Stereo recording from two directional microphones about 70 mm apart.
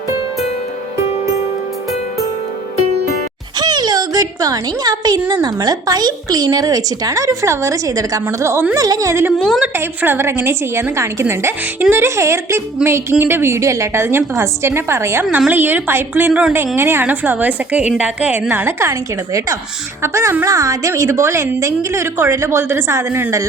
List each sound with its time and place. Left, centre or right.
3.6 s a sound: right
5.3 s speech: right
8.7 s a woman's voice: right
9.7 s a woman's voice: right
12.0 s a woman's voice: right
17.1 s a woman's voice: right
18.6 s a woman's voice: right